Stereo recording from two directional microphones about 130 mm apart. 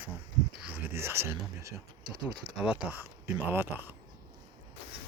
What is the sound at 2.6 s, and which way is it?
Speech, 10° right (ahead or behind).